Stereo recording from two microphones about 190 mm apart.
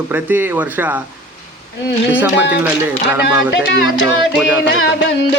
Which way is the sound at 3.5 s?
65° left (ahead or behind).